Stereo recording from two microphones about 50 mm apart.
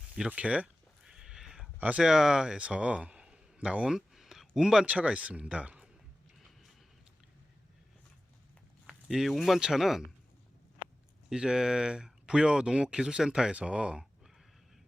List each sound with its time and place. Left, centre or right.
0.3 s speech: right
1.0 s a sound: centre
2.0 s speech: centre
2.6 s a man's voice: right
3.9 s a sound: centre
4.9 s speech: right
8.9 s a sound: centre
9.3 s speech: centre
11.3 s speech: centre